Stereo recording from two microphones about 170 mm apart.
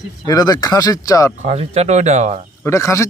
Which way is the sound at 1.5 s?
40° right (ahead or behind).